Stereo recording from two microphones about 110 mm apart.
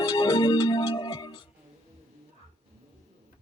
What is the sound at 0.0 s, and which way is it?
Organ, 35° left (ahead or behind).